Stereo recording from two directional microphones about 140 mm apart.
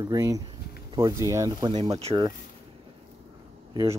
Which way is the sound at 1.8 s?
45° right (ahead or behind).